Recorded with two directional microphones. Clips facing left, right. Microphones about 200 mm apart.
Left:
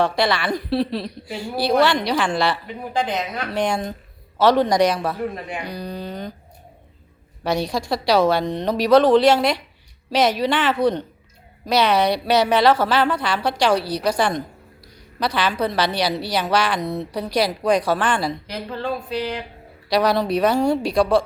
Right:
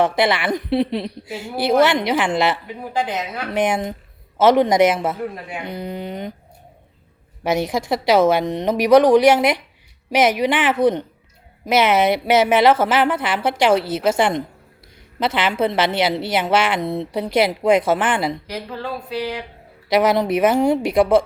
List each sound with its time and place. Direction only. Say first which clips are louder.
0.0 s a woman's voice: right 2 dB; 20° right (ahead or behind)
2.9 s speech: even; 10° right (ahead or behind)
3.5 s a woman's voice: right 3 dB; 20° right (ahead or behind)
7.4 s a woman's voice: right 2 dB; 20° right (ahead or behind)
18.4 s speech: left 1 dB; 10° right (ahead or behind)
19.9 s a woman's voice: right 2 dB; 20° right (ahead or behind)